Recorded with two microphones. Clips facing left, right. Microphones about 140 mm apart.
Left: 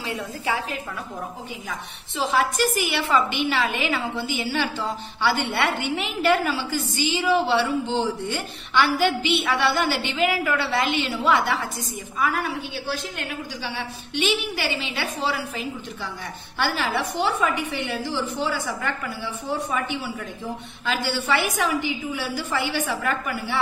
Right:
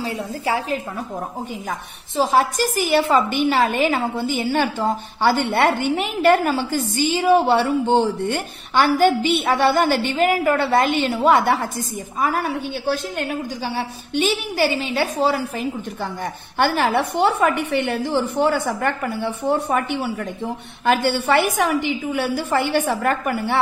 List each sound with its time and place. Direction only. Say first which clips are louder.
0.0 s a woman's voice: right 4 dB; 30° right (ahead or behind)
1.7 s a woman's voice: right 5 dB; 45° right (ahead or behind)
16.5 s a woman's voice: right 6 dB; 55° right (ahead or behind)